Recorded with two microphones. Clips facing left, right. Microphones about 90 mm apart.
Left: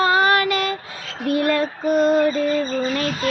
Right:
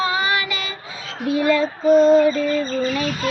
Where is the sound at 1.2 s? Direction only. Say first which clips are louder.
Right 1 dB; 55° left (ahead or behind).